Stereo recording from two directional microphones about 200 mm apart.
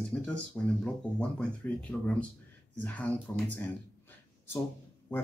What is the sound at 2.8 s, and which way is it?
Speech, 10° left (ahead or behind).